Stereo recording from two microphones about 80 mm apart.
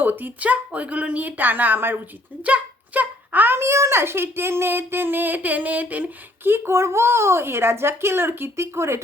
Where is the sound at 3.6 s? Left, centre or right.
Right.